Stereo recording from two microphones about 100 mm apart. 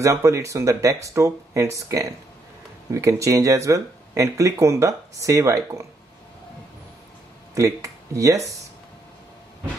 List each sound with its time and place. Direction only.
0.0 s speech: 30° right (ahead or behind)
7.5 s speech: 30° right (ahead or behind)